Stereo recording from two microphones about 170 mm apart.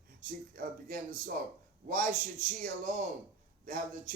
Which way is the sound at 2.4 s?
50° right (ahead or behind).